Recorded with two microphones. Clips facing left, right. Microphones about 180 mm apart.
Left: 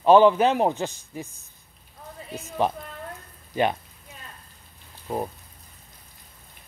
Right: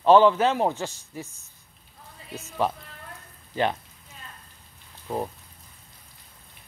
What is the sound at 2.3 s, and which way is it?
Speech, 20° left (ahead or behind).